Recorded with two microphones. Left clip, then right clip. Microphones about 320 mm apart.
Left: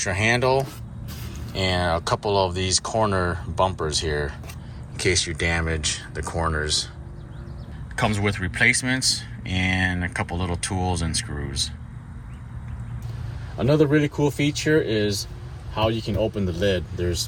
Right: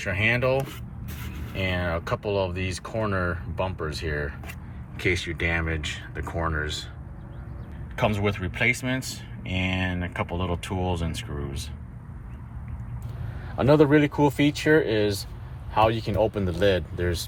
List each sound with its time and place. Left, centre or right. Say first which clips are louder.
0.0 s speech: left 3 dB; centre
1.5 s speech: left 5 dB; centre
7.9 s speech: left 1 dB; centre
13.6 s speech: right 1 dB; right